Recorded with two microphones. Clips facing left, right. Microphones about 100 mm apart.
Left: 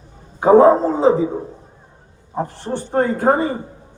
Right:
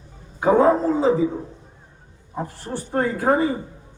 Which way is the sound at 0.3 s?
30° left (ahead or behind).